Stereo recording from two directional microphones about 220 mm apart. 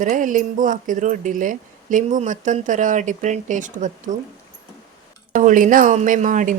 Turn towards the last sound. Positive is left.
turn(degrees=-35)  # may be behind; listen again after turning